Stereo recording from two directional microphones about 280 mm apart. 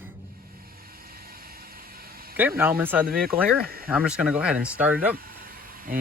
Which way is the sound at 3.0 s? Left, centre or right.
Right.